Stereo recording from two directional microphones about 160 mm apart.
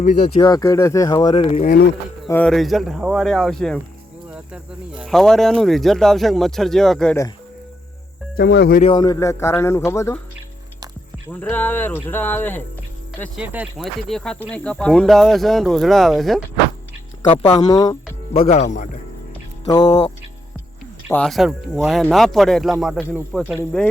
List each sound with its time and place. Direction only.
0.3 s speech: 25° left (ahead or behind)
1.5 s speech: 55° left (ahead or behind)
2.3 s speech: 5° left (ahead or behind)
8.4 s speech: 85° left
9.0 s speech: 20° left (ahead or behind)
11.3 s speech: 10° left (ahead or behind)
13.3 s speech: 10° right (ahead or behind)
13.8 s speech: 5° left (ahead or behind)
17.6 s speech: 25° left (ahead or behind)
18.4 s speech: 45° left (ahead or behind)
19.6 s speech: 25° left (ahead or behind)
21.1 s speech: 5° left (ahead or behind)